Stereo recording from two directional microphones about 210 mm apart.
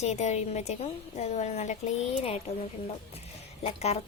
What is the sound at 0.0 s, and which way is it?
A woman's voice, 30° left (ahead or behind).